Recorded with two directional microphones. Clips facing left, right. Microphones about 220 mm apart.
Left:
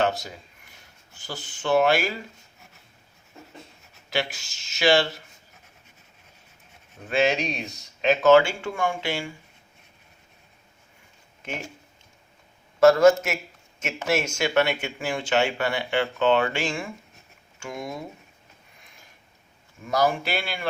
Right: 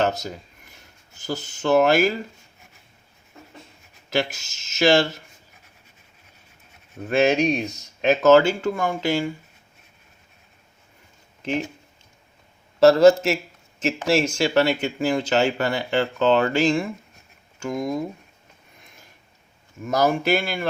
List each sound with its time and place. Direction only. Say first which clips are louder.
0.0 s speech: right 2 dB; 40° right (ahead or behind)
4.1 s speech: right 4 dB; 45° right (ahead or behind)
7.1 s speech: right 5 dB; 45° right (ahead or behind)
12.8 s a man's voice: right 3 dB; 30° right (ahead or behind)
19.9 s speech: right 4 dB; 45° right (ahead or behind)